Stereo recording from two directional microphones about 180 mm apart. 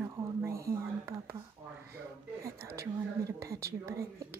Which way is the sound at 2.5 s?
15° right (ahead or behind).